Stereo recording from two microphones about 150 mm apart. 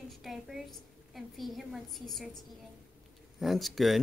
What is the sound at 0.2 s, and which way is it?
A woman's voice, centre (ahead or behind).